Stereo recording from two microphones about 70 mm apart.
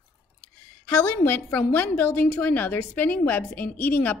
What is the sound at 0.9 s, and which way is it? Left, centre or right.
A woman's voice, left.